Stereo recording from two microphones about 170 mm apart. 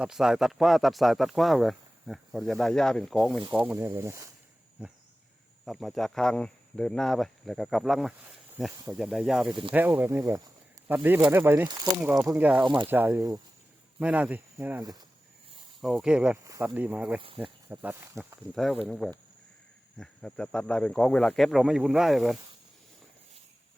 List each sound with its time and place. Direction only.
0.0 s speech: 5° right (ahead or behind)
9.5 s speech: 30° right (ahead or behind)
9.7 s speech: 10° right (ahead or behind)
11.7 s speech: 25° right (ahead or behind)
12.0 s speech: 5° right (ahead or behind)
12.6 s speech: 30° right (ahead or behind)
12.9 s speech: 10° right (ahead or behind)
16.4 s speech: 20° right (ahead or behind)
17.2 s speech: 30° right (ahead or behind)
17.4 s speech: 10° right (ahead or behind)
18.5 s speech: centre (ahead or behind)